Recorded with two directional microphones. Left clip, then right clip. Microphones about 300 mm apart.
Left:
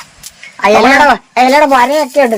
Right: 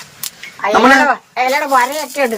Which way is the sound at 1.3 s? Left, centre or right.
Left.